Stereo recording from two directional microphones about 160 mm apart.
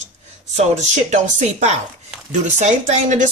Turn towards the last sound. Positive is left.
turn(degrees=-50)  # may be behind; listen again after turning